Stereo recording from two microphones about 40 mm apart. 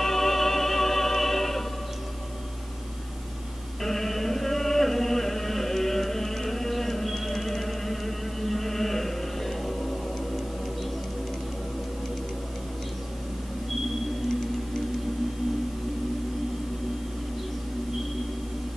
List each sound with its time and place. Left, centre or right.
0.0 s music: centre
3.8 s chant: centre